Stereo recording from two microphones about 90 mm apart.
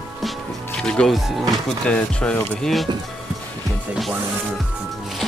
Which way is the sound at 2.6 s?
Centre (ahead or behind).